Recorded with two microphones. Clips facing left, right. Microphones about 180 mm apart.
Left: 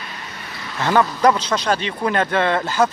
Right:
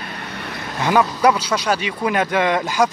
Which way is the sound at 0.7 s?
10° right (ahead or behind).